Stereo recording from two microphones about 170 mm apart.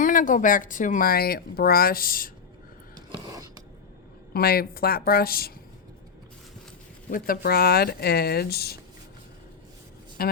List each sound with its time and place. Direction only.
0.0 s speech: 50° left (ahead or behind)
3.1 s a sound: 20° right (ahead or behind)
4.4 s speech: 65° left (ahead or behind)
7.1 s speech: 60° left (ahead or behind)
10.2 s a man's voice: 65° left (ahead or behind)